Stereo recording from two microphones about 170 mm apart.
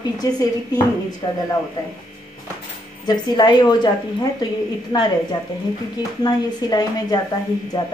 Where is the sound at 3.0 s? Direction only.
25° left (ahead or behind).